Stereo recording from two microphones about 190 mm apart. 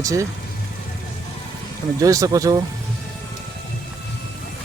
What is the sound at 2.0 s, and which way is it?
Speech, 15° right (ahead or behind).